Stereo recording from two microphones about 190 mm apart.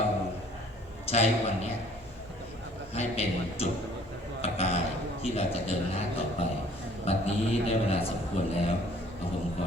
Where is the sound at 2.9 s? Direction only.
35° left (ahead or behind).